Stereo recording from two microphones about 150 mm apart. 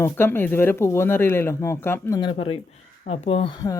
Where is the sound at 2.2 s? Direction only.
35° left (ahead or behind).